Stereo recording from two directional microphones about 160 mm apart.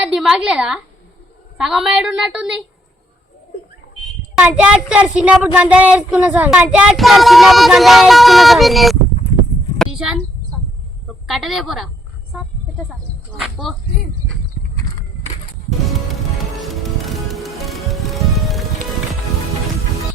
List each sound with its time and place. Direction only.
0.0 s a woman's voice: 5° right (ahead or behind)
4.4 s speech: 5° right (ahead or behind)
9.7 s a sound: centre (ahead or behind)
11.3 s speech: centre (ahead or behind)
13.4 s speech: centre (ahead or behind)
15.9 s music: centre (ahead or behind)